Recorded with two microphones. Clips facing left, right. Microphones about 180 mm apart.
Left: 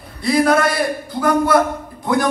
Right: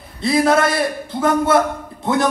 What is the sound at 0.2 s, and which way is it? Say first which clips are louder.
A man's voice: even; 25° right (ahead or behind).